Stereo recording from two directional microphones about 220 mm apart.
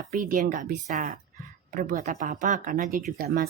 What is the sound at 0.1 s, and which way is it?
Speech, 40° right (ahead or behind).